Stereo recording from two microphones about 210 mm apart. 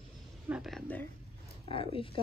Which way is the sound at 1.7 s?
25° left (ahead or behind).